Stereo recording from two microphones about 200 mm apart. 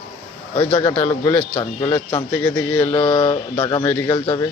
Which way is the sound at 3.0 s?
25° left (ahead or behind).